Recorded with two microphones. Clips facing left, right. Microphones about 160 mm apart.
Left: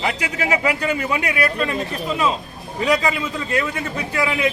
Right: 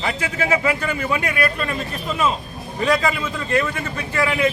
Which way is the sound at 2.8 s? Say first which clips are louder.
Even; 15° left (ahead or behind).